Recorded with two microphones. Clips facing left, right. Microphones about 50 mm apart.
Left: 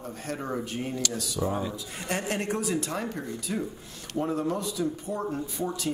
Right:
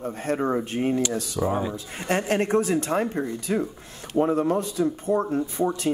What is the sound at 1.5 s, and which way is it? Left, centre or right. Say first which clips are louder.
Speech: right 4 dB; right.